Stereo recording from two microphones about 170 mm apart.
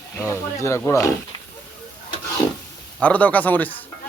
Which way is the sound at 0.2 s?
15° left (ahead or behind).